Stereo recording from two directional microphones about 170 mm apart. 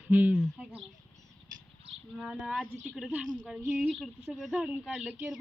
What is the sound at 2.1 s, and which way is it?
A woman's voice, centre (ahead or behind).